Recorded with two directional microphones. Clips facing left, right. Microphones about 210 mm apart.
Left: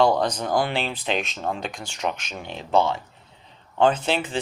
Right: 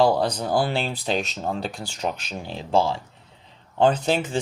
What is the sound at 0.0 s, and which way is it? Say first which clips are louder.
Speech: even; 30° right (ahead or behind).